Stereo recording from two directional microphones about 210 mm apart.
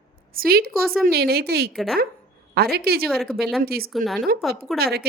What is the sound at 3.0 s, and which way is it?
Speech, centre (ahead or behind).